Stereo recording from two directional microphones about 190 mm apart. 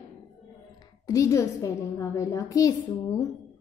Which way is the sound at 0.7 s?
20° left (ahead or behind).